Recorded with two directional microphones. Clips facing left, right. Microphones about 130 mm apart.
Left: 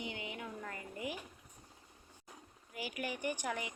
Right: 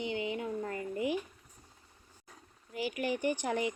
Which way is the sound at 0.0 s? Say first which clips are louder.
Right 9 dB; 25° right (ahead or behind).